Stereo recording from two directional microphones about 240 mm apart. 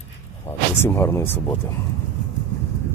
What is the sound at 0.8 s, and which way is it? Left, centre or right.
Speech, centre.